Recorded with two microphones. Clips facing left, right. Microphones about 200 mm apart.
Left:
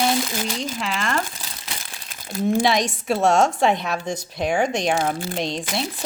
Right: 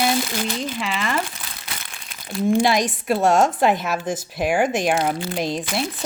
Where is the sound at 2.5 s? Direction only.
Centre (ahead or behind).